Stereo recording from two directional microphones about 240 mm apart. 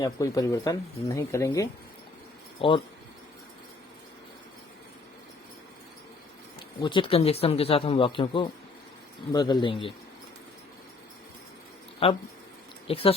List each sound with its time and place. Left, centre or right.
0.0 s speech: centre
6.8 s speech: left
12.0 s speech: left